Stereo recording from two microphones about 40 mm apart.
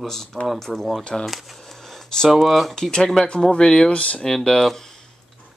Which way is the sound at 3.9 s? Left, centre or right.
Left.